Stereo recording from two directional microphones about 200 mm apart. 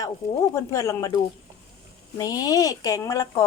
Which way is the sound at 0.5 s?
15° left (ahead or behind).